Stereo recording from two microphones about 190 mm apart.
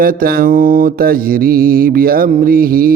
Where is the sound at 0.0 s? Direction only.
50° right (ahead or behind).